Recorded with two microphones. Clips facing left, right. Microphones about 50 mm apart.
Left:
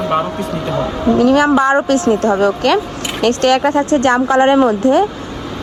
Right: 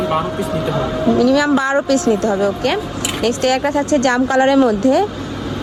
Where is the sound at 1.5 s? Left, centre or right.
Left.